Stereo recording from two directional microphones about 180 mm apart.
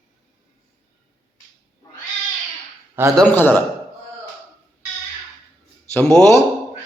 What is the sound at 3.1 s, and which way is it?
Speech, 10° left (ahead or behind).